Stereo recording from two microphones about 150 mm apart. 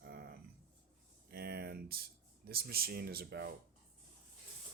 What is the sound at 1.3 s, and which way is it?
Speech, 90° right.